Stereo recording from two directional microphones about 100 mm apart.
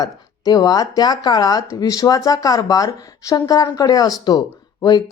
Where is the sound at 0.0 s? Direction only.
40° left (ahead or behind).